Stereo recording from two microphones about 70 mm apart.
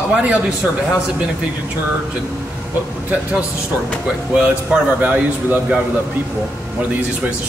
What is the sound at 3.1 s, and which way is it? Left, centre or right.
Speech, centre.